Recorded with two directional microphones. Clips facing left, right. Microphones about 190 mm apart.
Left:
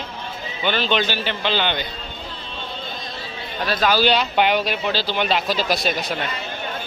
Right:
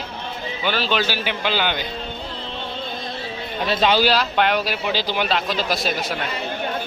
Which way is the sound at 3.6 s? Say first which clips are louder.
Right 1 dB; 25° right (ahead or behind).